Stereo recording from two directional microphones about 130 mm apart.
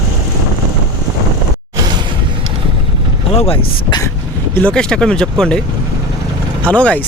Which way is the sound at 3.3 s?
50° left (ahead or behind).